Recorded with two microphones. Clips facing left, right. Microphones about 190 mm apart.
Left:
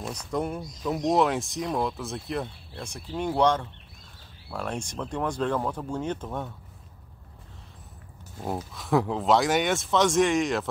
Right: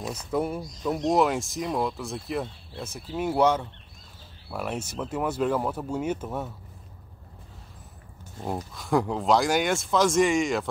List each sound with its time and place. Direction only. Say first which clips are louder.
0.0 s speech: right 2 dB; 5° right (ahead or behind)
8.4 s speech: even; centre (ahead or behind)